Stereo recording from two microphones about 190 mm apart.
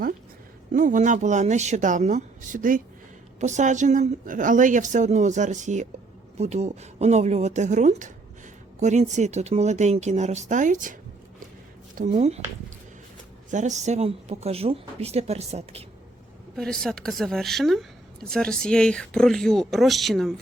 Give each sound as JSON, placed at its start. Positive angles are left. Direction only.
{"t": 0.7, "sound": "a woman's voice", "side_deg": -40}
{"t": 11.9, "sound": "a woman's voice", "side_deg": -35}
{"t": 13.5, "sound": "a woman's voice", "side_deg": -40}
{"t": 16.6, "sound": "speech", "side_deg": 5}